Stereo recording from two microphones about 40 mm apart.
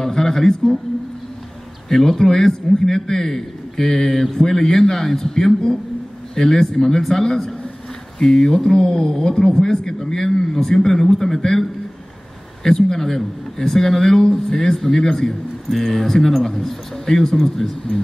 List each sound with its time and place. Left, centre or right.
0.0 s a man's voice: centre
1.9 s a man's voice: centre
12.6 s a man's voice: centre